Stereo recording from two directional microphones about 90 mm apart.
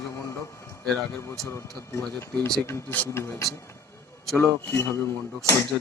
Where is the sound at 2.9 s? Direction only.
20° left (ahead or behind).